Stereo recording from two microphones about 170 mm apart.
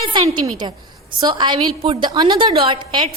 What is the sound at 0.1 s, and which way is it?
Speech, 25° right (ahead or behind).